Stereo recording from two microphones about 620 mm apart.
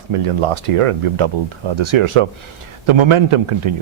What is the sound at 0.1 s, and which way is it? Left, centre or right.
A man's voice, right.